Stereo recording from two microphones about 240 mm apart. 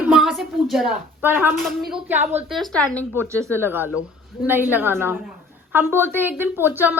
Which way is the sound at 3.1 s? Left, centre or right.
Centre.